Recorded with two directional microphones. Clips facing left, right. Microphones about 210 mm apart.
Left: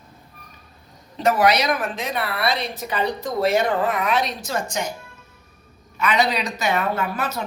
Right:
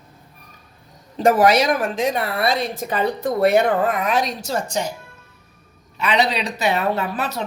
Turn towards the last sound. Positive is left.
turn(degrees=-35)  # may be behind; listen again after turning